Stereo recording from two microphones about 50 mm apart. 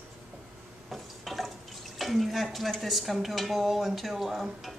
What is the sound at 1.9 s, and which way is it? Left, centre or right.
Speech, centre.